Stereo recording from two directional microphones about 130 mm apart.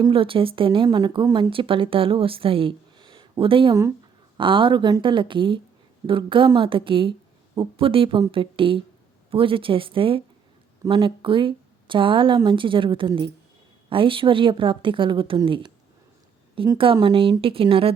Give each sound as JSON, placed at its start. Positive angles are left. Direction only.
{"t": 0.1, "sound": "a woman's voice", "side_deg": -45}
{"t": 16.7, "sound": "a woman's voice", "side_deg": -45}